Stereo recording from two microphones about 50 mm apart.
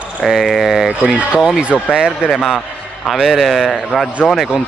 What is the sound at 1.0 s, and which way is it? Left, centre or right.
Speech, centre.